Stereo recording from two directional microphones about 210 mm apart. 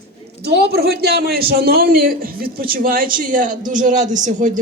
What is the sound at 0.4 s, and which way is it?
A man's voice, 50° right (ahead or behind).